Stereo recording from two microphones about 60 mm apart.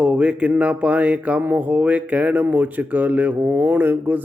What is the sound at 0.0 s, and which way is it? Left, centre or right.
Speech, centre.